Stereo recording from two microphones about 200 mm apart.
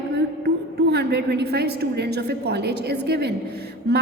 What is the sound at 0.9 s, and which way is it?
A woman's voice, 55° right (ahead or behind).